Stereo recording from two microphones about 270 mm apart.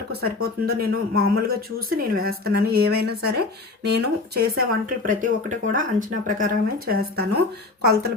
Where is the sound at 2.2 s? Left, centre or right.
Right.